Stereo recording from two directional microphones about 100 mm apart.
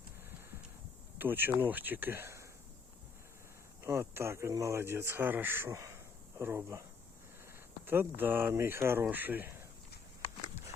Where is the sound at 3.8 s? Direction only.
25° right (ahead or behind).